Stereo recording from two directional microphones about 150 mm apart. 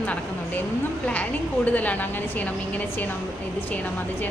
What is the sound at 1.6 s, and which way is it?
A woman's voice, 10° left (ahead or behind).